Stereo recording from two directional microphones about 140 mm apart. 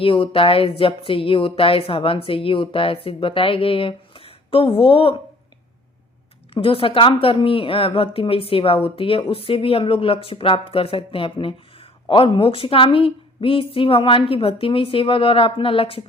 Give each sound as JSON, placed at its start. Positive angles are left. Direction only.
{"t": 0.0, "sound": "speech", "side_deg": 40}
{"t": 6.5, "sound": "speech", "side_deg": 40}